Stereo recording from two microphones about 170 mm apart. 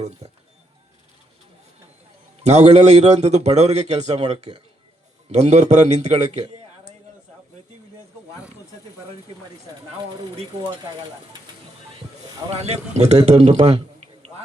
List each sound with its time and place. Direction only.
0.2 s music: 40° right (ahead or behind)
2.4 s a man's voice: 40° right (ahead or behind)
12.5 s a man's voice: 40° right (ahead or behind)